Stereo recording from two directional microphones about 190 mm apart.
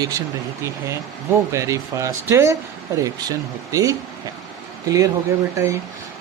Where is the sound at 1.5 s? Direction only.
15° right (ahead or behind).